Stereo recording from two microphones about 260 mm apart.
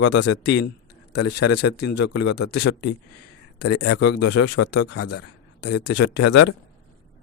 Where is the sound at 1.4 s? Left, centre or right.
Left.